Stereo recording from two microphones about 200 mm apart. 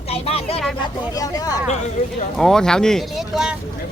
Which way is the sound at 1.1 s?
15° left (ahead or behind).